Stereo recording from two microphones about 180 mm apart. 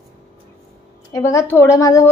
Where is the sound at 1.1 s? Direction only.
15° left (ahead or behind).